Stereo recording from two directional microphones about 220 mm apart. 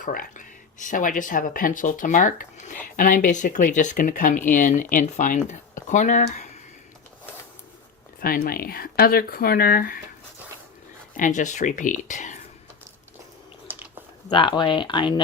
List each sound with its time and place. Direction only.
0.0 s speech: 40° left (ahead or behind)
8.2 s speech: 40° left (ahead or behind)
11.2 s speech: 35° left (ahead or behind)
13.7 s chewing: 10° right (ahead or behind)
14.3 s speech: 20° left (ahead or behind)